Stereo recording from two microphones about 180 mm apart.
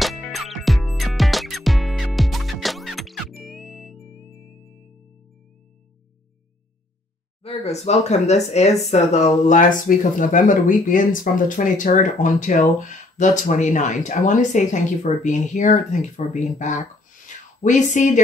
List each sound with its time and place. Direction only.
0.0 s music: centre (ahead or behind)
7.4 s speech: 35° left (ahead or behind)